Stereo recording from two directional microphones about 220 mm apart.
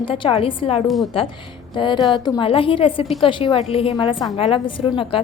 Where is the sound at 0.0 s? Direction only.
25° left (ahead or behind).